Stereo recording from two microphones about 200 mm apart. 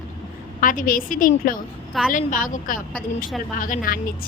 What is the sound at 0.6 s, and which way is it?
Speech, 40° left (ahead or behind).